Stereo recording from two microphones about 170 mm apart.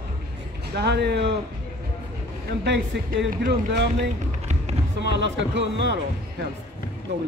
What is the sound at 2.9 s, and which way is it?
Speech, 90° right.